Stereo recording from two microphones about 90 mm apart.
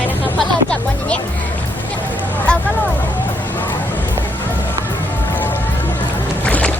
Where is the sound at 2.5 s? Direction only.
10° left (ahead or behind).